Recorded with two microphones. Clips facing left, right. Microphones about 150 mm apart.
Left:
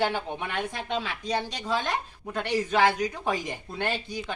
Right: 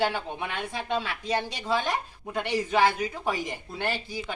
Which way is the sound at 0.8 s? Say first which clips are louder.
Right 1 dB; 10° right (ahead or behind).